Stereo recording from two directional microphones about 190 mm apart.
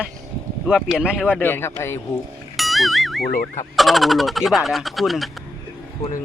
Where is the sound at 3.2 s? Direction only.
50° left (ahead or behind).